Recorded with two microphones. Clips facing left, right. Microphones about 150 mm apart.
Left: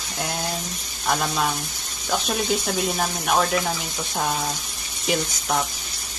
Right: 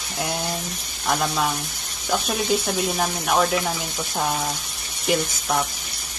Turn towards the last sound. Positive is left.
turn(degrees=0)  # may be behind; listen again after turning